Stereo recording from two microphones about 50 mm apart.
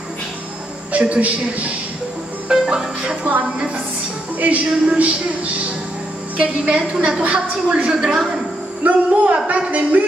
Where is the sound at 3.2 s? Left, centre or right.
Right.